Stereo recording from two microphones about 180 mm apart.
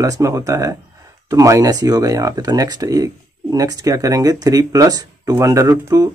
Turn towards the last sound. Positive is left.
turn(degrees=-20)  # may be behind; listen again after turning